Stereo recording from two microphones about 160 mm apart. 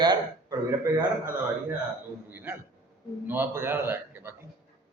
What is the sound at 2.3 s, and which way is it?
A man's voice, 15° right (ahead or behind).